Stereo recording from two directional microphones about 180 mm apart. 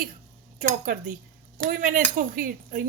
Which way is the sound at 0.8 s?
55° right (ahead or behind).